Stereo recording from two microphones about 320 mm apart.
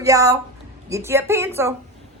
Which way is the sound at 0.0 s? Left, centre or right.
Centre.